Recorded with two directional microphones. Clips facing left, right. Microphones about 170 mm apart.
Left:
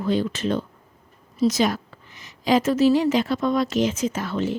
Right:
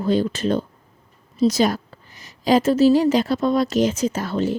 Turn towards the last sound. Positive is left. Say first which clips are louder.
# right 3 dB
turn(degrees=-35)  # may be behind; listen again after turning